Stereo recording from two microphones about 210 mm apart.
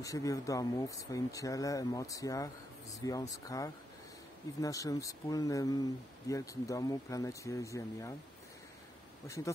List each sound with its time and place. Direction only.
0.0 s speech: 15° left (ahead or behind)